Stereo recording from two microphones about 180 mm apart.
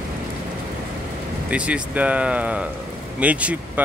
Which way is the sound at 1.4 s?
5° right (ahead or behind).